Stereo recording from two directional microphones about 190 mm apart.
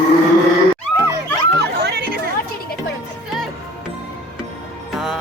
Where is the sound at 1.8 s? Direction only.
60° right (ahead or behind).